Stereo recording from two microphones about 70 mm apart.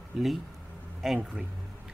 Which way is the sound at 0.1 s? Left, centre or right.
Centre.